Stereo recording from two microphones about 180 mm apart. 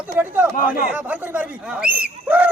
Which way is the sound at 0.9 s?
10° right (ahead or behind).